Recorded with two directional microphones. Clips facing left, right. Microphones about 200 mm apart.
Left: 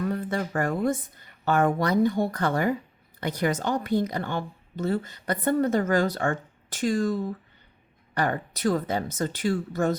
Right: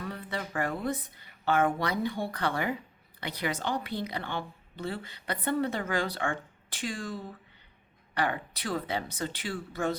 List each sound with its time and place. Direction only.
0.0 s a woman's voice: 45° left (ahead or behind)